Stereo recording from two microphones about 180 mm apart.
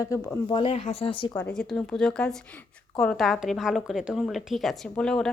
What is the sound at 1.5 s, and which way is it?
A woman's voice, 5° left (ahead or behind).